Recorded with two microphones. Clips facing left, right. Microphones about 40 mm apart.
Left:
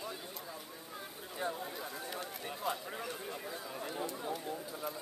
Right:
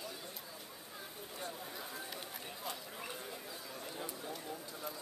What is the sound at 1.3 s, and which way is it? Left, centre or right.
Speech, centre.